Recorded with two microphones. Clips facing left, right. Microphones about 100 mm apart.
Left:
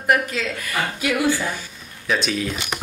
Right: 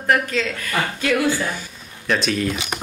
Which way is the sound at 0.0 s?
10° left (ahead or behind).